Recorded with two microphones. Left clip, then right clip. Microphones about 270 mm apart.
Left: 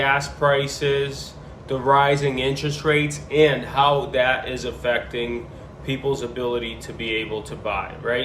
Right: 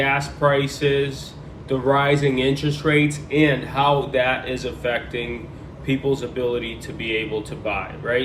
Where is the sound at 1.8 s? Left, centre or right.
Left.